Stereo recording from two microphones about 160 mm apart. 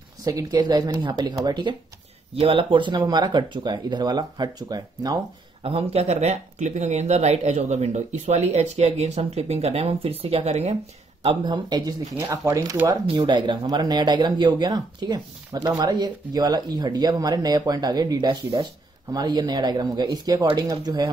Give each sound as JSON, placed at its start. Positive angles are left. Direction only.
{"t": 0.2, "sound": "speech", "side_deg": -20}
{"t": 5.7, "sound": "speech", "side_deg": -35}
{"t": 11.2, "sound": "speech", "side_deg": -30}
{"t": 13.0, "sound": "speech", "side_deg": -30}